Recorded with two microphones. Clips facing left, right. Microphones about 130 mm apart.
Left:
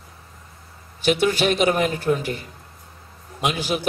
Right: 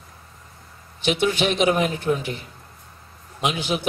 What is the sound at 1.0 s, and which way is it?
A man's voice, 40° left (ahead or behind).